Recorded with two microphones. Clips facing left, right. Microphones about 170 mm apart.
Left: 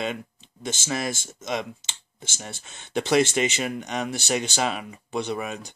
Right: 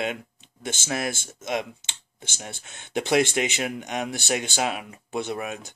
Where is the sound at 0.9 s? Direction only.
10° right (ahead or behind).